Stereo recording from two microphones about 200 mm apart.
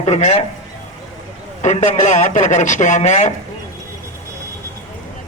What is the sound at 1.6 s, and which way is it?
Speech, 35° left (ahead or behind).